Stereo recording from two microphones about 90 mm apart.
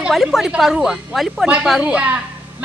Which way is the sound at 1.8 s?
15° right (ahead or behind).